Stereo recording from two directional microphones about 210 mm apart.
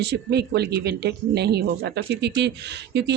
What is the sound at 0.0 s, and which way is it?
Speech, 50° right (ahead or behind).